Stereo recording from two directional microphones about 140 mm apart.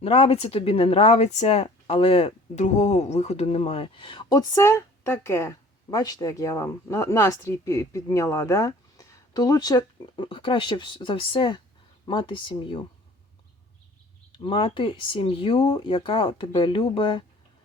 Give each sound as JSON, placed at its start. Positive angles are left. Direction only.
{"t": 0.0, "sound": "a woman's voice", "side_deg": 45}
{"t": 14.3, "sound": "speech", "side_deg": 35}